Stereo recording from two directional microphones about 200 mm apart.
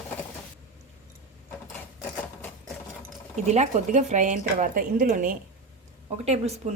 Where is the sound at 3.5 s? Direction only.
35° right (ahead or behind).